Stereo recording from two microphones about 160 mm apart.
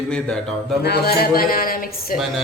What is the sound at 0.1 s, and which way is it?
Speech, 5° left (ahead or behind).